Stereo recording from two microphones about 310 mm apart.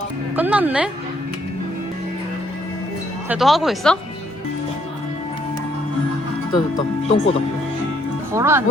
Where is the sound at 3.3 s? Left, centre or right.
Centre.